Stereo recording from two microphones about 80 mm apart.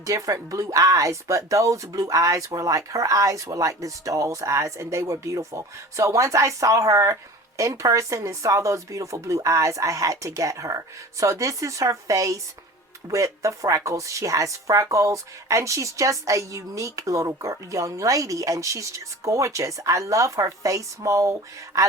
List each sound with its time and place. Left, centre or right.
0.0 s speech: right